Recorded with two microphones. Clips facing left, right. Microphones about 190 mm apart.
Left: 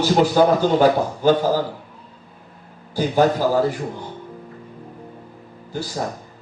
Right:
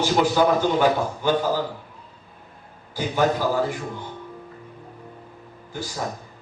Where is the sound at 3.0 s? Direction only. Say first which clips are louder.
Left 4 dB; 40° left (ahead or behind).